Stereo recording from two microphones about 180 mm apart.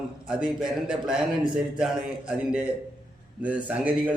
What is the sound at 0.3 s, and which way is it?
A man's voice, 5° right (ahead or behind).